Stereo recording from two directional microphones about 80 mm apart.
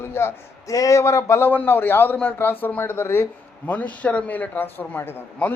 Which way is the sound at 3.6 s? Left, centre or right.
Centre.